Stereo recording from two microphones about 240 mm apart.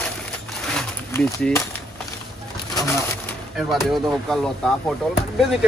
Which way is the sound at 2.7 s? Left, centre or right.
Centre.